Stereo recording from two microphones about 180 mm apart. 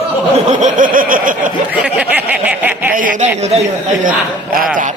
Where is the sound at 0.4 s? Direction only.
40° right (ahead or behind).